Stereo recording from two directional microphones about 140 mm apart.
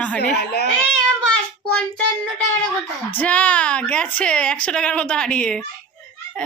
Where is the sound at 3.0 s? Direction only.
10° left (ahead or behind).